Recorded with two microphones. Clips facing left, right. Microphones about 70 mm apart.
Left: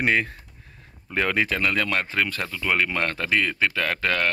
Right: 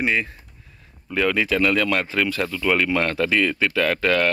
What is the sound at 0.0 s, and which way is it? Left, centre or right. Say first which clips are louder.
Speech: even; left.